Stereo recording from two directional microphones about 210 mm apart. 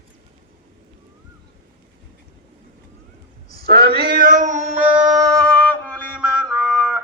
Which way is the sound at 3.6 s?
45° right (ahead or behind).